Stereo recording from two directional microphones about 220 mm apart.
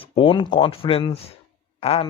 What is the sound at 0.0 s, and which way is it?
Speech, 25° left (ahead or behind).